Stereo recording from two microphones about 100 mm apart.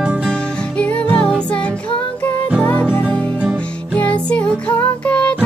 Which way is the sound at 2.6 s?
15° left (ahead or behind).